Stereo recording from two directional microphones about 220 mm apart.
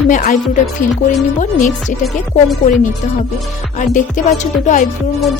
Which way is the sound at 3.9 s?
35° left (ahead or behind).